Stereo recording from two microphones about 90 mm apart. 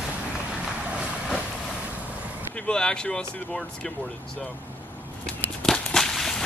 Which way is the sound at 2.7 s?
10° left (ahead or behind).